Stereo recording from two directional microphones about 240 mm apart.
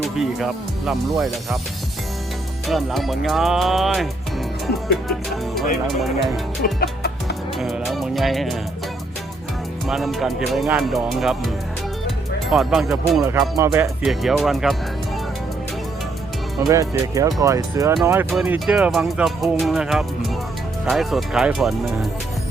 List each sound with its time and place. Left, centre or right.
0.2 s speech: centre
2.6 s speech: centre
5.9 s speech: centre
6.7 s music: left
7.6 s speech: centre
9.8 s speech: centre
12.0 s music: centre
13.6 s speech: centre
14.0 s speech: centre
16.6 s speech: centre